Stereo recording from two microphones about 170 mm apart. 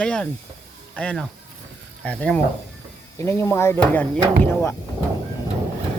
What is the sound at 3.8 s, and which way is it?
Speech, 5° left (ahead or behind).